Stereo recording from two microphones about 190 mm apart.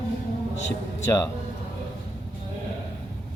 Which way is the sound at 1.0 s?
15° left (ahead or behind).